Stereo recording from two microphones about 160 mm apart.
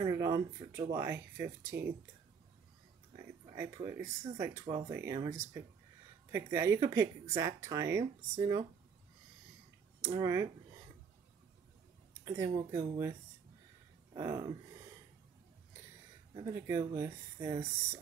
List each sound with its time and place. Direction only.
0.0 s a sound: 20° right (ahead or behind)
0.6 s speech: 30° right (ahead or behind)
0.9 s speech: 15° right (ahead or behind)
3.5 s speech: 20° right (ahead or behind)
6.3 s speech: 20° right (ahead or behind)
10.0 s speech: 20° right (ahead or behind)
12.3 s speech: 20° right (ahead or behind)
14.1 s speech: 20° right (ahead or behind)
16.5 s speech: 15° right (ahead or behind)